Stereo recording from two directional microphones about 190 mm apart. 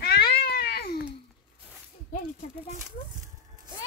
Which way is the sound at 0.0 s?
55° left (ahead or behind).